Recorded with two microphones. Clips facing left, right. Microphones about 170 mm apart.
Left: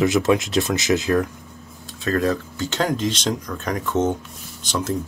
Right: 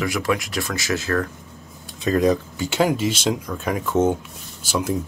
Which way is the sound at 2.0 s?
15° right (ahead or behind).